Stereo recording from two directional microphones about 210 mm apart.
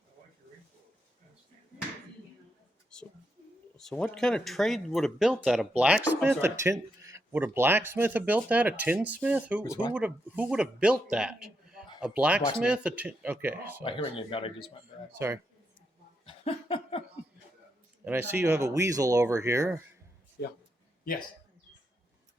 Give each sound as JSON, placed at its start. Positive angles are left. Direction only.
{"t": 2.9, "sound": "whispering", "side_deg": 5}
{"t": 3.8, "sound": "a man's voice", "side_deg": 5}
{"t": 13.8, "sound": "speech", "side_deg": 25}
{"t": 15.2, "sound": "speech", "side_deg": -10}
{"t": 16.2, "sound": "a sound", "side_deg": 25}
{"t": 18.0, "sound": "speech", "side_deg": -10}